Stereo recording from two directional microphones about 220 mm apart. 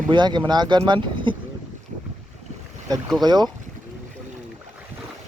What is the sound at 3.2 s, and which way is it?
Speech, 20° right (ahead or behind).